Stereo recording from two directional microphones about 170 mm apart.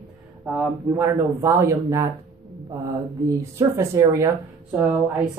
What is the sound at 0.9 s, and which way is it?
A woman's voice, 15° right (ahead or behind).